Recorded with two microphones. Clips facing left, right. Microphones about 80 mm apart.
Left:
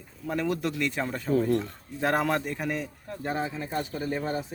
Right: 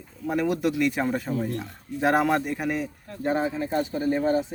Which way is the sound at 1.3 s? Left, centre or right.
Left.